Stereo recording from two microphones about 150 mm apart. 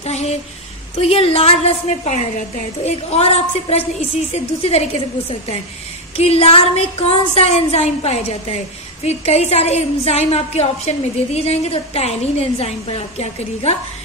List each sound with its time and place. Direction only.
0.0 s a woman's voice: 45° left (ahead or behind)
6.1 s a woman's voice: 40° left (ahead or behind)